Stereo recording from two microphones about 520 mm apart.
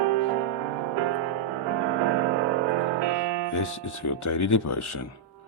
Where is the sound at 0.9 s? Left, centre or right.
Right.